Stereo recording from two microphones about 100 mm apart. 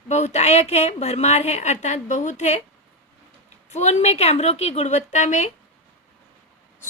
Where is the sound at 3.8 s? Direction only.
90° left.